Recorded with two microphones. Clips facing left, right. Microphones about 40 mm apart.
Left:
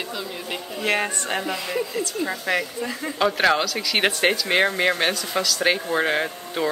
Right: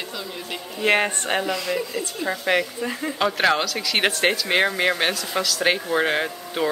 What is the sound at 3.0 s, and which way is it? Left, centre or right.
Speech, centre.